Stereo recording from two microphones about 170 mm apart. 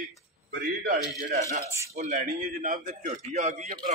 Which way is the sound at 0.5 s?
60° right (ahead or behind).